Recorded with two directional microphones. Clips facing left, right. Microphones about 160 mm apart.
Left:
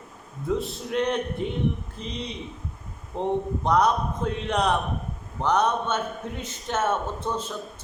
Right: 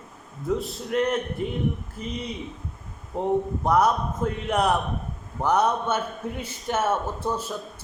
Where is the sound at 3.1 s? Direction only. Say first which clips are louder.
Right 2 dB; 5° right (ahead or behind).